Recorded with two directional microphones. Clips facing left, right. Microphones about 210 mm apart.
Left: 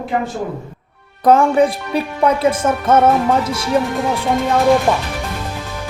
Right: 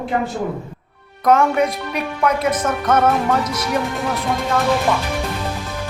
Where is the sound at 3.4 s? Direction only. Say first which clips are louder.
Left 2 dB; 30° left (ahead or behind).